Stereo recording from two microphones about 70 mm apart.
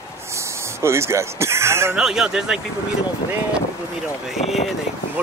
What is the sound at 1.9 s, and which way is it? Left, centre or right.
Speech, centre.